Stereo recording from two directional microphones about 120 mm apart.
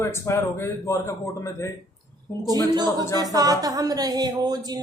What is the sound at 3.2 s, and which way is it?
Speech, 30° right (ahead or behind).